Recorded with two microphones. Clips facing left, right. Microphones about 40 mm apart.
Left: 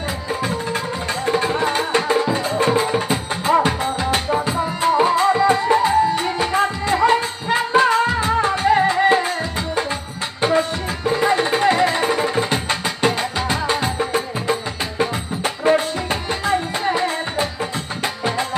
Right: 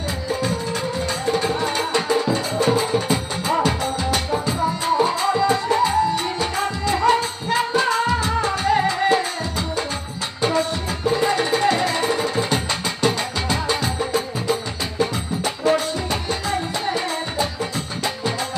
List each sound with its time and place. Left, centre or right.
0.4 s music: left
11.3 s music: left